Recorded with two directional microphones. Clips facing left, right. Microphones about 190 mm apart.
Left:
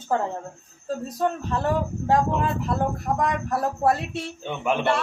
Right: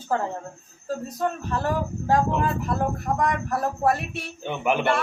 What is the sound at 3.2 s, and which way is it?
Speech, 25° left (ahead or behind).